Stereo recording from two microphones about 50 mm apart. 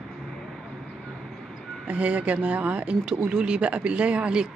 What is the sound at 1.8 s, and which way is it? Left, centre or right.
Speech, right.